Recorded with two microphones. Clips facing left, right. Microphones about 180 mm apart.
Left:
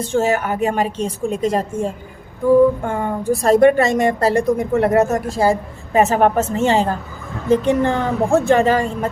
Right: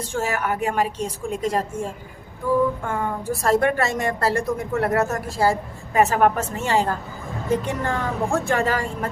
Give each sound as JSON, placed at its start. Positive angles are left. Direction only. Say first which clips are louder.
{"t": 0.1, "sound": "a woman's voice", "louder": "left 7 dB", "side_deg": 20}